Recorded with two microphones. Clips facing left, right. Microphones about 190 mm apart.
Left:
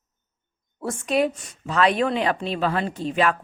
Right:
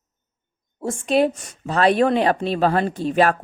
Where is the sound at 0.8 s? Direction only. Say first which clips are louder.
Right 4 dB; 30° right (ahead or behind).